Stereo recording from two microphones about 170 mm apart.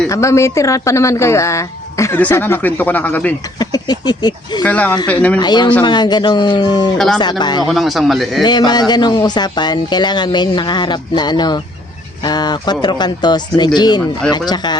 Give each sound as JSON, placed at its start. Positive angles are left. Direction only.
{"t": 0.1, "sound": "speech", "side_deg": 15}
{"t": 3.6, "sound": "speech", "side_deg": 25}
{"t": 4.6, "sound": "speech", "side_deg": 10}
{"t": 5.4, "sound": "speech", "side_deg": 25}
{"t": 7.7, "sound": "a man's voice", "side_deg": 0}
{"t": 8.4, "sound": "speech", "side_deg": 25}